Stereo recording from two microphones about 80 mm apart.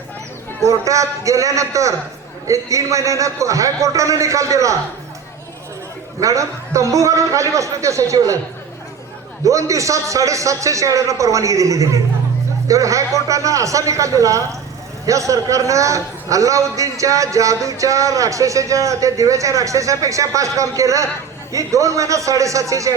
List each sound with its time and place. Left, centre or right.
0.6 s a man's voice: right
6.1 s a man's voice: right
9.4 s a man's voice: right